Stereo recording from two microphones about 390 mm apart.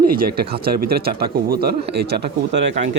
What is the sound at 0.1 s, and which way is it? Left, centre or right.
Speech, right.